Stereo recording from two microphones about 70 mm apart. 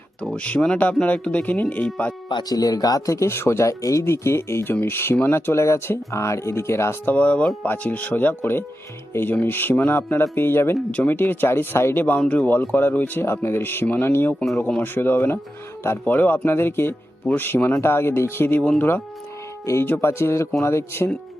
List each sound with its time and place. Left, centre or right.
0.2 s speech: centre
2.4 s speech: left
3.2 s speech: left
3.7 s speech: left
7.0 s speech: left
12.2 s speech: centre
12.7 s speech: left